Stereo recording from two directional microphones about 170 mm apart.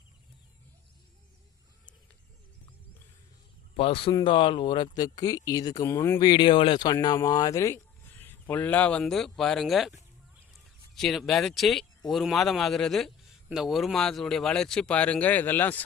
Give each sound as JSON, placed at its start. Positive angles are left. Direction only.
{"t": 3.8, "sound": "speech", "side_deg": 35}
{"t": 6.1, "sound": "speech", "side_deg": 25}
{"t": 10.9, "sound": "speech", "side_deg": 0}